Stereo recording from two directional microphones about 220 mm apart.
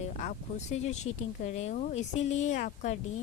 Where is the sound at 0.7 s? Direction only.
30° left (ahead or behind).